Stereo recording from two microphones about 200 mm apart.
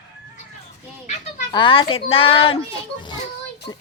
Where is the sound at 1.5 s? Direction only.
25° left (ahead or behind).